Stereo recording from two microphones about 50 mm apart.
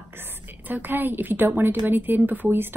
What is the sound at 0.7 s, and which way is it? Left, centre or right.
Speech, right.